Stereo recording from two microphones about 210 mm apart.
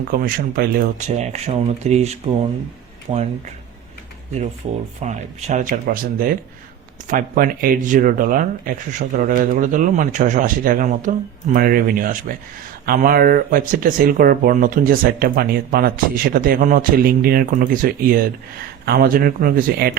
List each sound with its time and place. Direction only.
0.1 s speech: 45° right (ahead or behind)
5.0 s speech: 35° right (ahead or behind)